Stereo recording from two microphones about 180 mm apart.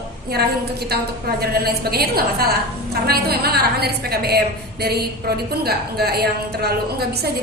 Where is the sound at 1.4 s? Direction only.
60° right (ahead or behind).